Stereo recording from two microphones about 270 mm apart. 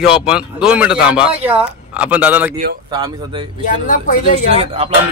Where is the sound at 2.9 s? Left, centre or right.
Centre.